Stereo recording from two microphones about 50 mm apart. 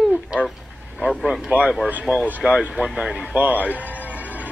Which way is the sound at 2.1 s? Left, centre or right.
Centre.